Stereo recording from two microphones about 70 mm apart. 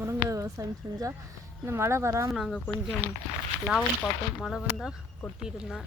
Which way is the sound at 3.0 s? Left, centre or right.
Right.